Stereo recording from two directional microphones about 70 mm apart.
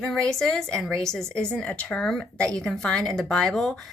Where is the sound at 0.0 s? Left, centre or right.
Centre.